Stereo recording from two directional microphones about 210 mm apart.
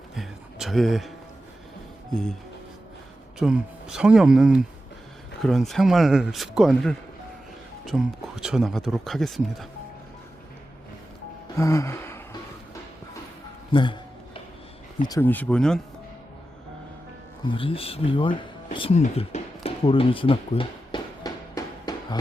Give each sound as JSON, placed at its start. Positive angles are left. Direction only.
{"t": 0.2, "sound": "a sound", "side_deg": 0}
{"t": 3.3, "sound": "speech", "side_deg": -5}
{"t": 11.5, "sound": "gasp", "side_deg": 15}
{"t": 13.7, "sound": "speech", "side_deg": 20}
{"t": 15.0, "sound": "speech", "side_deg": 15}
{"t": 17.5, "sound": "a sound", "side_deg": 25}